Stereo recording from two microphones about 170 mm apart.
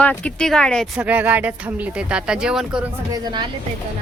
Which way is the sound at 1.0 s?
10° right (ahead or behind).